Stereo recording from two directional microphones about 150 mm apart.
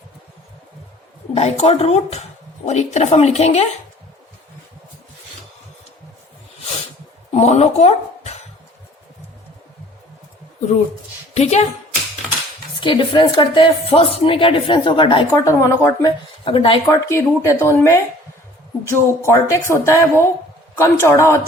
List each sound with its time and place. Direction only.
1.3 s speech: 45° left (ahead or behind)
7.3 s speech: 45° left (ahead or behind)
11.3 s speech: 50° left (ahead or behind)
12.8 s speech: 35° left (ahead or behind)
15.3 s speech: 20° left (ahead or behind)
16.4 s speech: 35° left (ahead or behind)
16.9 s a man's voice: 20° left (ahead or behind)